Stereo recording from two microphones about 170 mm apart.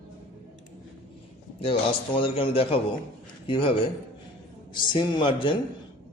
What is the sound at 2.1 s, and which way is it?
A man's voice, 30° left (ahead or behind).